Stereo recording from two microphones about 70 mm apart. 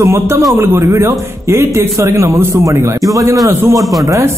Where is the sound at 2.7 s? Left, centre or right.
Right.